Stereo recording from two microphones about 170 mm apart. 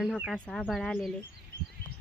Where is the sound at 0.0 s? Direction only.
Centre (ahead or behind).